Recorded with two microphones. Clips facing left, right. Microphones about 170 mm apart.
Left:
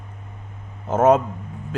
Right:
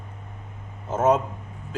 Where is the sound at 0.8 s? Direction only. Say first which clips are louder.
Left 5 dB; 60° left (ahead or behind).